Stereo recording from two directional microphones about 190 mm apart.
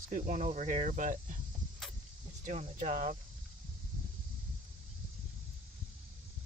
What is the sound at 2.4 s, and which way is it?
Speech, 40° right (ahead or behind).